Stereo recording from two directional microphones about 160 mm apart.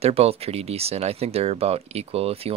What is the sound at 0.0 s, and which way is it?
Speech, 40° right (ahead or behind).